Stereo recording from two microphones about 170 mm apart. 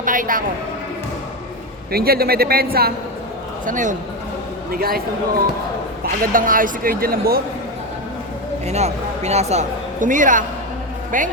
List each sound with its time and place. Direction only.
0.0 s a man's voice: 50° right (ahead or behind)
1.9 s a man's voice: 65° right (ahead or behind)
3.7 s a man's voice: 50° right (ahead or behind)
4.7 s a man's voice: 60° right (ahead or behind)
8.6 s a man's voice: 40° right (ahead or behind)